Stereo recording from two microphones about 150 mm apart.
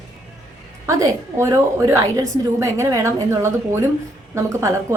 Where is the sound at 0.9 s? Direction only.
20° right (ahead or behind).